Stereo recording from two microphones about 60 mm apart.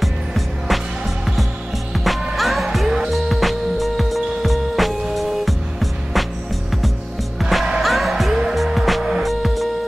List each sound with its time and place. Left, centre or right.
0.0 s music: centre
2.0 s music: centre
7.8 s music: centre